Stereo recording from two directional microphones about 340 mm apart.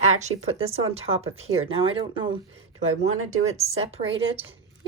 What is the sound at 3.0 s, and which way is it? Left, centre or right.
Speech, right.